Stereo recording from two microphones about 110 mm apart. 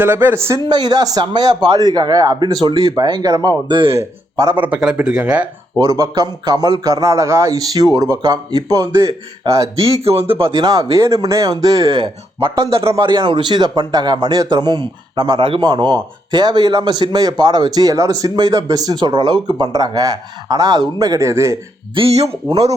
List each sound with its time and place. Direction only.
0.0 s speech: 20° right (ahead or behind)
0.7 s a man's voice: 40° right (ahead or behind)
3.7 s speech: 50° right (ahead or behind)
4.5 s speech: 15° right (ahead or behind)
5.8 s a man's voice: 30° right (ahead or behind)
9.9 s speech: 65° right (ahead or behind)
10.6 s a man's voice: 35° right (ahead or behind)
21.9 s speech: 65° right (ahead or behind)